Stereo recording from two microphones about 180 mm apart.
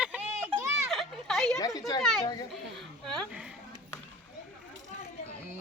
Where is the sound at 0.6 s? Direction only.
15° right (ahead or behind).